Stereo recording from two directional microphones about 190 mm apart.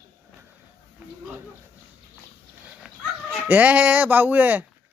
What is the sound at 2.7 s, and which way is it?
Dog, 5° right (ahead or behind).